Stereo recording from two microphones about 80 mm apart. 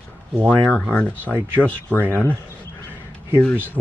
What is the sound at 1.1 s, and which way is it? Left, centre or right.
Speech, right.